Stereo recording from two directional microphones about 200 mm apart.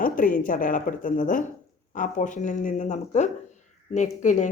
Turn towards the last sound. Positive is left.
turn(degrees=40)  # may be behind; listen again after turning